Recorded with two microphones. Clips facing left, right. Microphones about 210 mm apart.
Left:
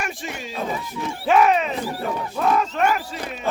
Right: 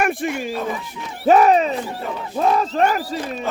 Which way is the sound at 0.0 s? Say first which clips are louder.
Right 9 dB; 55° right (ahead or behind).